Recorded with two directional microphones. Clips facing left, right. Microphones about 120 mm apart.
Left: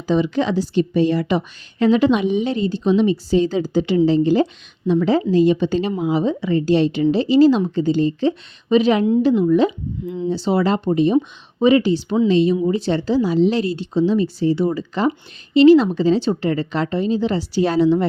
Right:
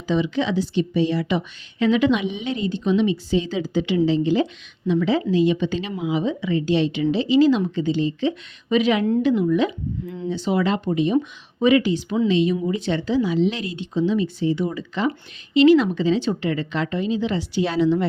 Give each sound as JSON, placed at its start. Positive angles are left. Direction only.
{"t": 0.1, "sound": "speech", "side_deg": 40}